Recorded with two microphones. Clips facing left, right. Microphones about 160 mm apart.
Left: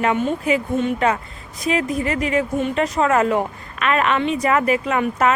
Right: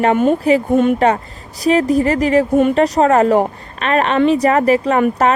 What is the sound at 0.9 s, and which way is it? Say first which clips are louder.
Speech: right 5 dB; 35° right (ahead or behind).